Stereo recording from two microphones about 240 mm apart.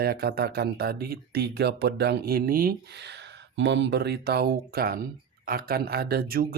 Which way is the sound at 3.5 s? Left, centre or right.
Right.